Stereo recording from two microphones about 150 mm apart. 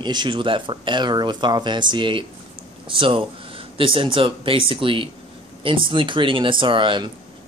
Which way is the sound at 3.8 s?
35° right (ahead or behind).